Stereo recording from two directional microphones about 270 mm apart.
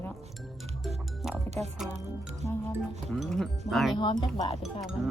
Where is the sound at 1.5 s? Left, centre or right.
Right.